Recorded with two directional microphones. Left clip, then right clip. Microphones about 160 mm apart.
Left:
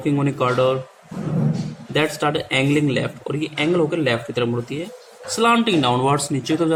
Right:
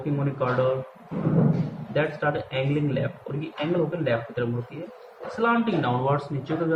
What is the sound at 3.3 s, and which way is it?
Speech, 90° left.